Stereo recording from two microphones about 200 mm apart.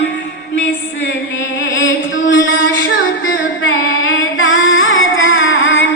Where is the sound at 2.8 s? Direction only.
80° left.